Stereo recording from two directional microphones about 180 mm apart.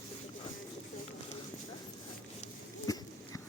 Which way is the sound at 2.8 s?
20° left (ahead or behind).